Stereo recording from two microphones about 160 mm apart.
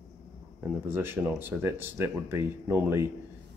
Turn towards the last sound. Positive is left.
turn(degrees=-15)  # may be behind; listen again after turning